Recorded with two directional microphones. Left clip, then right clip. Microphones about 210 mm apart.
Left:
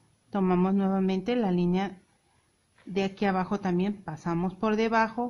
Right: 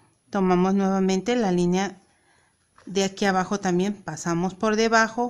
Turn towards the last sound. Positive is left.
turn(degrees=-40)  # may be behind; listen again after turning